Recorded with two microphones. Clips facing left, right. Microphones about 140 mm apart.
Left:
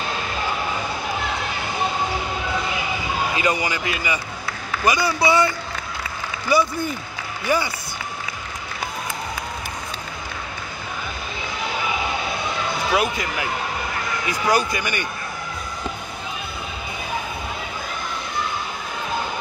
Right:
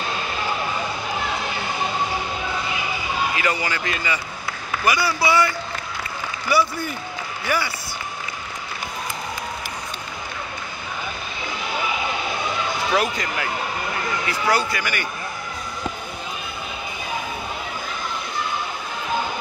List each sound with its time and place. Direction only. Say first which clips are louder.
3.3 s a man's voice: left 2 dB; 15° left (ahead or behind)
6.5 s a man's voice: left 1 dB; 20° left (ahead or behind)
12.9 s speech: left 1 dB; 10° left (ahead or behind)